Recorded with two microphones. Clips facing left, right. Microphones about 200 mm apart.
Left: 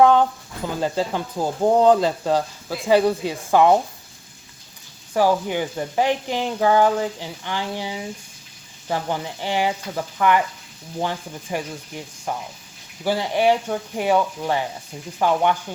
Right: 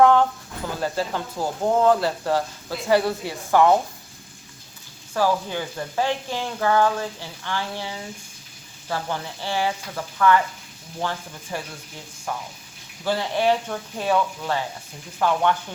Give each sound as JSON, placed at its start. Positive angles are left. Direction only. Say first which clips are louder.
{"t": 0.0, "sound": "a sound", "louder": "left 1 dB", "side_deg": 20}
{"t": 0.8, "sound": "speech", "louder": "left 3 dB", "side_deg": 15}
{"t": 5.1, "sound": "speech", "louder": "left 3 dB", "side_deg": 15}